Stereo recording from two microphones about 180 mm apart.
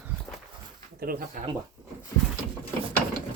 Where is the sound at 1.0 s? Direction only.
55° right (ahead or behind).